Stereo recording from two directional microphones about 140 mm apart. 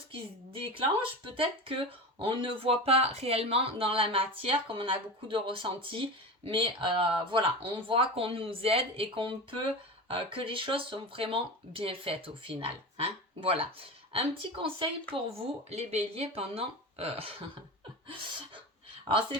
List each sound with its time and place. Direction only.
0.1 s speech: 40° right (ahead or behind)